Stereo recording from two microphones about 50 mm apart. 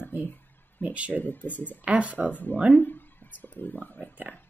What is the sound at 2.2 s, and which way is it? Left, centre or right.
Speech, left.